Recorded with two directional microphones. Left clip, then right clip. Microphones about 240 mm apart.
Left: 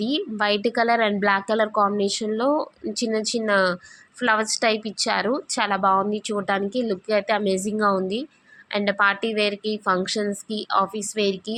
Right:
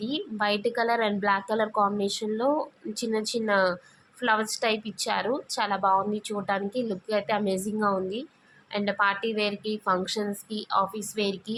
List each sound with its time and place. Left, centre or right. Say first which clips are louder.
0.0 s a woman's voice: left 5 dB; centre